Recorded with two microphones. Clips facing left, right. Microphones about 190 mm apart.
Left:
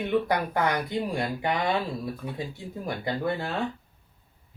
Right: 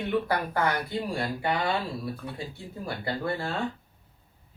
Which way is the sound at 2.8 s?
20° left (ahead or behind).